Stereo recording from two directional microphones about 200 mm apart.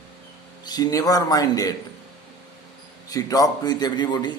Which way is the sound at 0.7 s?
20° left (ahead or behind).